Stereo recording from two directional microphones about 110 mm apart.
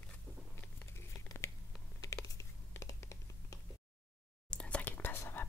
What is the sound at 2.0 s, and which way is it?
Computer keyboard, 30° left (ahead or behind).